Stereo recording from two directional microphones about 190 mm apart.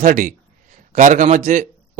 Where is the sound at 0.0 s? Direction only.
45° right (ahead or behind).